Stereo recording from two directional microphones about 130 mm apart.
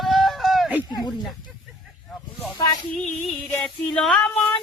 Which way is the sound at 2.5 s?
25° left (ahead or behind).